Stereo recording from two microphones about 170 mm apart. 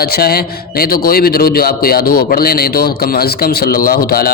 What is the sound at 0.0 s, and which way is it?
A man's voice, 65° left (ahead or behind).